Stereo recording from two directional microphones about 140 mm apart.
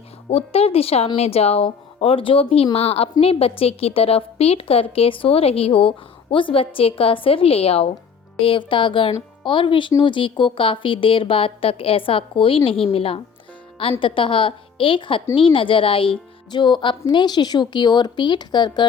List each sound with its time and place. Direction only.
0.3 s a woman's voice: 45° left (ahead or behind)